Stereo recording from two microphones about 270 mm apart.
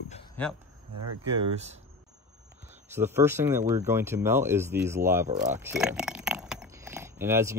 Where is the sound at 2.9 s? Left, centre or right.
Centre.